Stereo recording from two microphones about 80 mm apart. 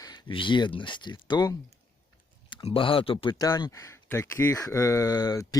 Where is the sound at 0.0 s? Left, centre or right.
Left.